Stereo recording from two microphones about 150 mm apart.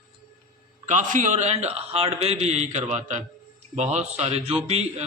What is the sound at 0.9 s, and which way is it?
A man's voice, 55° right (ahead or behind).